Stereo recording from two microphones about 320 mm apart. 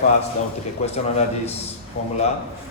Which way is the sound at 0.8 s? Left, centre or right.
Left.